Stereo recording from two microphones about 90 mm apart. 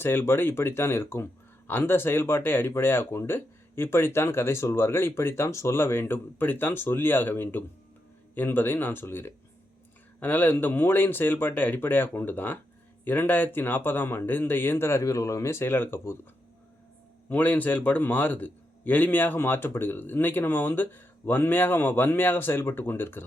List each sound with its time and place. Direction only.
0.0 s speech: 25° left (ahead or behind)
17.2 s speech: 15° left (ahead or behind)